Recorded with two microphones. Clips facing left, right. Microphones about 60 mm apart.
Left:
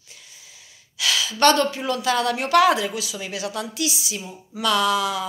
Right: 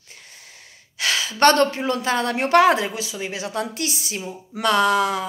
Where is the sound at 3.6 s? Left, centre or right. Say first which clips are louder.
Even; right.